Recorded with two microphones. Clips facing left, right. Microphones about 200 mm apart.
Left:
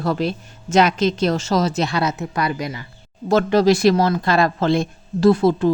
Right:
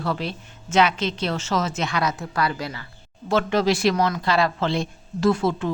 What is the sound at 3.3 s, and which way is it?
Speech, 40° left (ahead or behind).